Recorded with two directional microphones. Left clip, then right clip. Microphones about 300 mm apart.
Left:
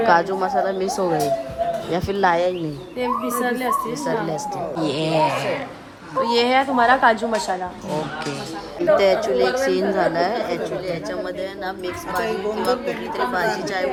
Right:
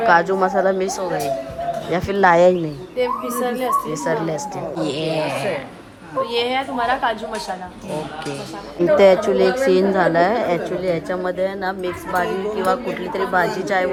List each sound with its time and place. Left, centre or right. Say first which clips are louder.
0.0 s a woman's voice: right 2 dB; centre
4.0 s a woman's voice: right 2 dB; centre
6.2 s a woman's voice: left 4 dB; left
8.8 s a woman's voice: right 4 dB; centre